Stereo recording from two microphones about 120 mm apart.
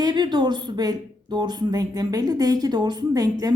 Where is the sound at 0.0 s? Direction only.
35° right (ahead or behind).